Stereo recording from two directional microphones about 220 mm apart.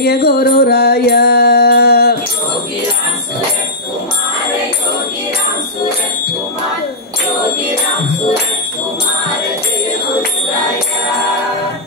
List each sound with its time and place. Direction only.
0.0 s music: 45° left (ahead or behind)